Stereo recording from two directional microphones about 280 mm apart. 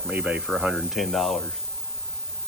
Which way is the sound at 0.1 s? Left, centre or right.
Centre.